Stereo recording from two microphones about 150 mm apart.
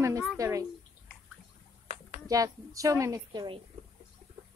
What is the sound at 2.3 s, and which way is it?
A woman's voice, 20° right (ahead or behind).